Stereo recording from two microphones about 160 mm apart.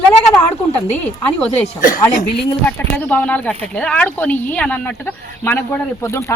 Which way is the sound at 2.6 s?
10° left (ahead or behind).